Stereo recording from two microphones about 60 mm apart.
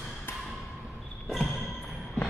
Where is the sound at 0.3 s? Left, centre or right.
Left.